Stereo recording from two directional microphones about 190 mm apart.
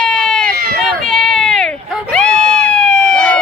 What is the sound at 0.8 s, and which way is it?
Run, centre (ahead or behind).